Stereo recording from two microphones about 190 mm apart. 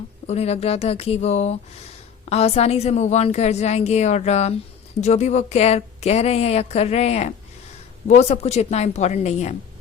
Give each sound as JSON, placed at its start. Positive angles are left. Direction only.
{"t": 0.3, "sound": "a woman's voice", "side_deg": 35}